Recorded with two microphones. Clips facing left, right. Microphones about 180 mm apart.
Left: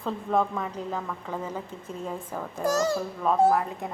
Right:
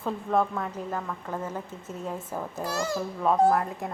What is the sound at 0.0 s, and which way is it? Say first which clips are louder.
A woman's voice: even; centre (ahead or behind).